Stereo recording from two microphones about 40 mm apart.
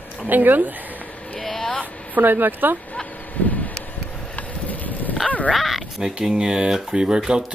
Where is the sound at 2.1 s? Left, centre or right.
Right.